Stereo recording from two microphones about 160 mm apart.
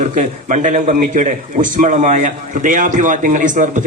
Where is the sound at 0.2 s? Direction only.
50° right (ahead or behind).